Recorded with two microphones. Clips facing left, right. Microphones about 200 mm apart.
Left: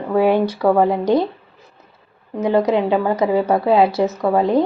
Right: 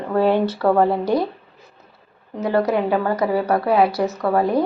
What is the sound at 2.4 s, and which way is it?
A woman's voice, 20° left (ahead or behind).